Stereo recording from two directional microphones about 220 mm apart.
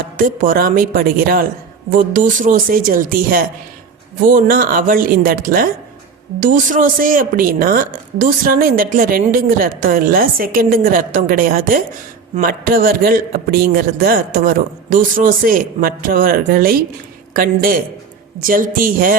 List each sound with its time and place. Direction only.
0.2 s a woman's voice: 40° right (ahead or behind)